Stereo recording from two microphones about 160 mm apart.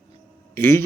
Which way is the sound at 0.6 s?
15° left (ahead or behind).